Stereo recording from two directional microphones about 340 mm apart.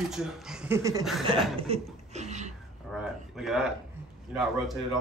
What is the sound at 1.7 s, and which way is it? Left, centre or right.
Chuckle, centre.